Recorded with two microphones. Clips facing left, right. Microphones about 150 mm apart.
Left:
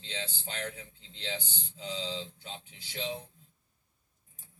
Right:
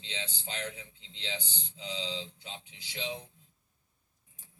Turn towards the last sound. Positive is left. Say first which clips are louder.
# left 2 dB
turn(degrees=45)  # may be behind; listen again after turning